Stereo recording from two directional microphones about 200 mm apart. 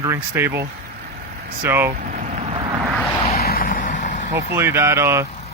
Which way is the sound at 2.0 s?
40° right (ahead or behind).